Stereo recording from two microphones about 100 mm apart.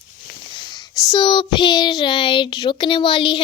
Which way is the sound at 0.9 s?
40° left (ahead or behind).